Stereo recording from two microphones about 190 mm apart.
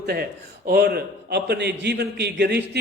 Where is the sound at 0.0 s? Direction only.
55° right (ahead or behind).